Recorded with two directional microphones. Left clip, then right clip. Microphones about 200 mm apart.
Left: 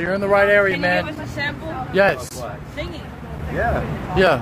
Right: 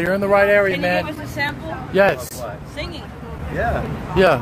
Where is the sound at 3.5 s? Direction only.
Centre (ahead or behind).